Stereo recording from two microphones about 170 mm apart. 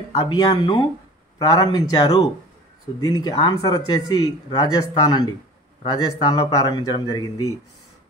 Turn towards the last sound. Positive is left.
turn(degrees=20)  # may be behind; listen again after turning